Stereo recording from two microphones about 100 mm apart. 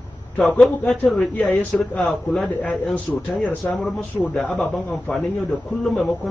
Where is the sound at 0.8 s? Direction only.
15° left (ahead or behind).